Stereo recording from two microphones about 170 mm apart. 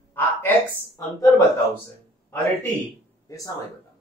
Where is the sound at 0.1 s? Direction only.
10° left (ahead or behind).